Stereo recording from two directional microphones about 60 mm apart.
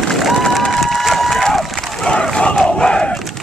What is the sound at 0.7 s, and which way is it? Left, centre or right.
Crowd, centre.